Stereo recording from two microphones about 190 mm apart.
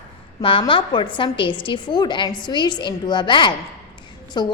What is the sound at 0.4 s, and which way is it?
A woman's voice, 25° left (ahead or behind).